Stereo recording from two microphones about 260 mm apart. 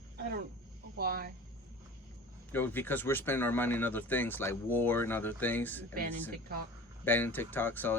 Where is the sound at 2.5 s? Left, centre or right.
Centre.